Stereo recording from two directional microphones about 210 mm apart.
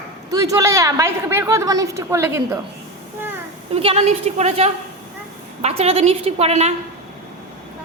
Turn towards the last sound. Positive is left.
turn(degrees=-30)  # may be behind; listen again after turning